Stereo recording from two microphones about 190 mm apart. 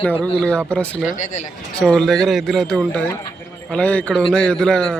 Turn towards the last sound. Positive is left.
turn(degrees=5)  # may be behind; listen again after turning